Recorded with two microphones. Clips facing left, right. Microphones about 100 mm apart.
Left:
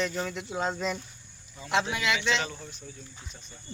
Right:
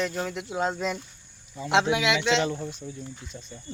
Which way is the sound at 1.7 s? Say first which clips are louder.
Right 5 dB; 90° right.